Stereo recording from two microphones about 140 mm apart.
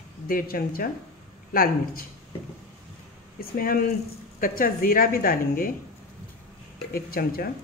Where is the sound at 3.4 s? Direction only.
90° left.